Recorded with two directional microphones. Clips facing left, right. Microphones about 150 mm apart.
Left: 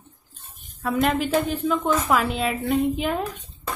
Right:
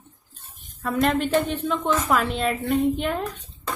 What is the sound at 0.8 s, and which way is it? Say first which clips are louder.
Speech: even; 5° left (ahead or behind).